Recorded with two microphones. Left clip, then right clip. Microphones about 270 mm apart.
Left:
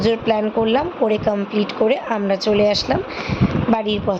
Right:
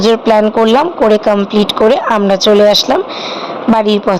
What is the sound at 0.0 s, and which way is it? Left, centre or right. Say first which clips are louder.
Speech: right 9 dB; centre.